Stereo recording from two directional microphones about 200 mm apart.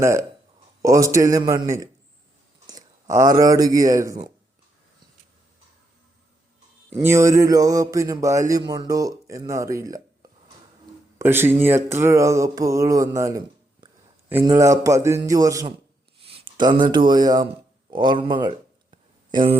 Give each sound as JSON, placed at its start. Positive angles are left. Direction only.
{"t": 0.0, "sound": "speech", "side_deg": -15}
{"t": 6.9, "sound": "speech", "side_deg": -15}
{"t": 11.2, "sound": "speech", "side_deg": -10}
{"t": 17.9, "sound": "a sound", "side_deg": -25}